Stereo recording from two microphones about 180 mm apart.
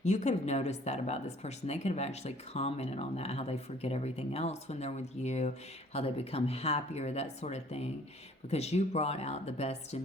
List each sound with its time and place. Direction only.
0.0 s speech: 40° left (ahead or behind)